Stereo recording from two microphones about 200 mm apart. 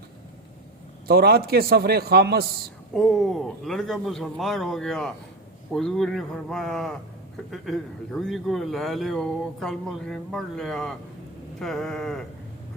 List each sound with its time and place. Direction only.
1.0 s a man's voice: 50° right (ahead or behind)
2.9 s speech: centre (ahead or behind)